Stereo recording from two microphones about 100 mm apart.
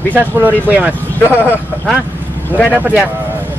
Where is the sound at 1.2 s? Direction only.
20° left (ahead or behind).